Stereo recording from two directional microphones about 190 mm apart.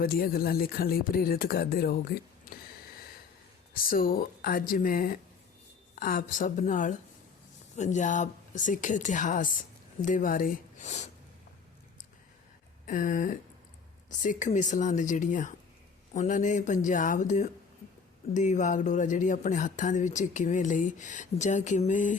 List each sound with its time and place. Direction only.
0.0 s speech: 50° left (ahead or behind)
3.8 s speech: 50° left (ahead or behind)
12.8 s speech: 45° left (ahead or behind)